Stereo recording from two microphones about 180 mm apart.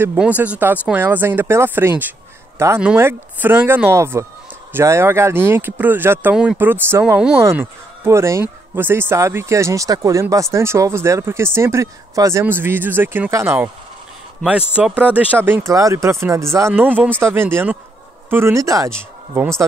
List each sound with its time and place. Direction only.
0.0 s speech: 10° right (ahead or behind)
14.8 s speech: 5° right (ahead or behind)